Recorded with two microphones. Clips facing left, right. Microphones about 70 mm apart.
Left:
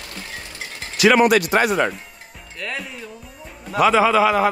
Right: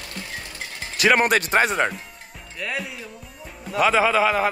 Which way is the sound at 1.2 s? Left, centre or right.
Right.